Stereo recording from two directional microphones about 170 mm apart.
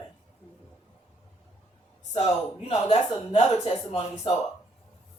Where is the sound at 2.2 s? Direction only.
40° left (ahead or behind).